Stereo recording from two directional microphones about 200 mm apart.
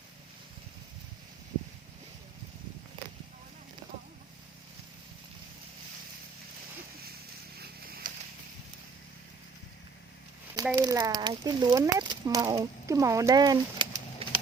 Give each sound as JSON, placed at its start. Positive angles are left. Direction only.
{"t": 7.6, "sound": "a sound", "side_deg": -50}
{"t": 10.8, "sound": "speech", "side_deg": -15}
{"t": 14.2, "sound": "pigeon", "side_deg": -30}